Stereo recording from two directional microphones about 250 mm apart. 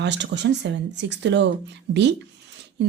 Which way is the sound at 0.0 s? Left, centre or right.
Right.